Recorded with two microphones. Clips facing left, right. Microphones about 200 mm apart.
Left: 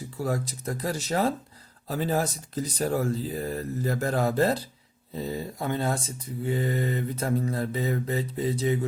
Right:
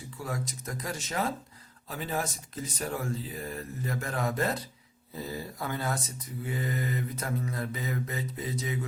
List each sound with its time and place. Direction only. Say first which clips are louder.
0.2 s speech: left 7 dB; 35° left (ahead or behind)